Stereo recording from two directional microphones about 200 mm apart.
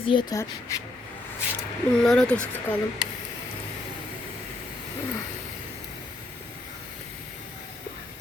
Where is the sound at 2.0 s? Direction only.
5° left (ahead or behind).